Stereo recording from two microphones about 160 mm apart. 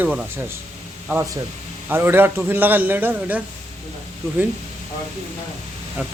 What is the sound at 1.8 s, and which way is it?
Speech, 15° right (ahead or behind).